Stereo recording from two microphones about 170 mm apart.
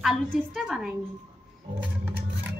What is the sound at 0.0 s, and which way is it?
Speech, centre (ahead or behind).